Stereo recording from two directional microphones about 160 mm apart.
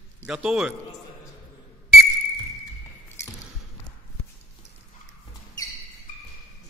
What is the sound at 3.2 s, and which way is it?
Squish, 15° left (ahead or behind).